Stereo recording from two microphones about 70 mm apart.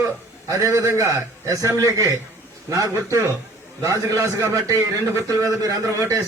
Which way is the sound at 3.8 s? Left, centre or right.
Right.